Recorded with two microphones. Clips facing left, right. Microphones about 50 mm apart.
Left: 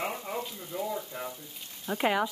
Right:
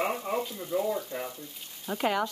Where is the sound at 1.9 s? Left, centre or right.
Centre.